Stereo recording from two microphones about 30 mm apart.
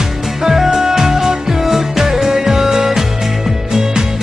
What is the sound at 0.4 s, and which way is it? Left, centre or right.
Music, centre.